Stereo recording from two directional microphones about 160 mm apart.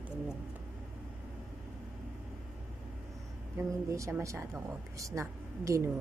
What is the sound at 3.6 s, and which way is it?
Speech, 20° right (ahead or behind).